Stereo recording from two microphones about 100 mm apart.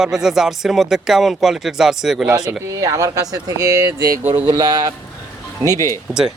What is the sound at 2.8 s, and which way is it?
Speech, 35° right (ahead or behind).